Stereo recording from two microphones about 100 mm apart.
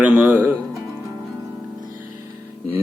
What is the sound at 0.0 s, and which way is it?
Music, 15° right (ahead or behind).